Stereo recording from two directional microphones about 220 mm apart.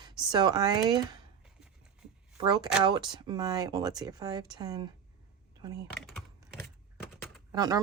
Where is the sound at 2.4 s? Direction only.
20° right (ahead or behind).